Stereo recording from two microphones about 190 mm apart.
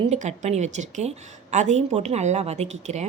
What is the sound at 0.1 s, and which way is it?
A woman's voice, 35° right (ahead or behind).